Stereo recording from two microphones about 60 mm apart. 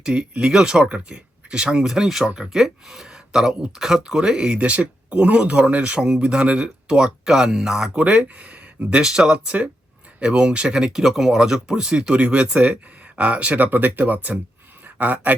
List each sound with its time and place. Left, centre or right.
0.0 s speech: centre